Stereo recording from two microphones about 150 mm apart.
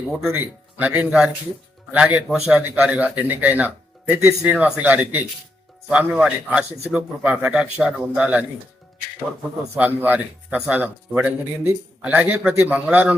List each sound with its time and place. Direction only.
0.3 s speech: 10° right (ahead or behind)
9.7 s speech: 10° right (ahead or behind)